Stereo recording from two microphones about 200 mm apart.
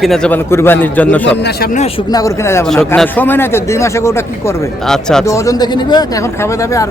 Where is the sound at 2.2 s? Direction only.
15° left (ahead or behind).